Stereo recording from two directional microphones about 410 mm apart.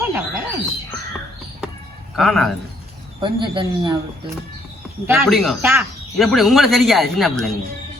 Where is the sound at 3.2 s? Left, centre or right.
Centre.